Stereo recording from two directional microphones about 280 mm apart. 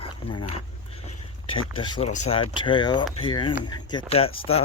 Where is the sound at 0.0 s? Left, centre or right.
Centre.